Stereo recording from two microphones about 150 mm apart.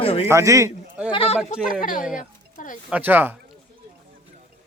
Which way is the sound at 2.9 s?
10° right (ahead or behind).